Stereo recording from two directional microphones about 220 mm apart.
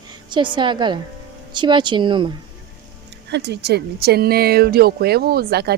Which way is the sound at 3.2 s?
50° right (ahead or behind).